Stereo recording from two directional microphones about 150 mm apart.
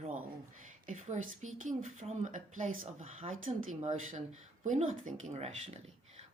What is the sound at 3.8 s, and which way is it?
Speech, 50° right (ahead or behind).